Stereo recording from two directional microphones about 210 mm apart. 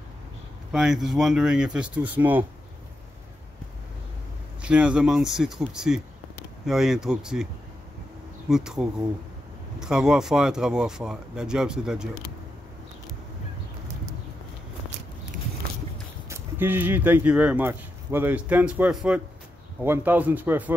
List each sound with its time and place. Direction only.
0.7 s speech: centre (ahead or behind)
4.6 s speech: 5° right (ahead or behind)
8.5 s speech: 5° right (ahead or behind)
16.3 s speech: 10° right (ahead or behind)